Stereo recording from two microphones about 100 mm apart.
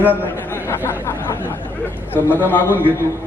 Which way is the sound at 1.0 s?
25° left (ahead or behind).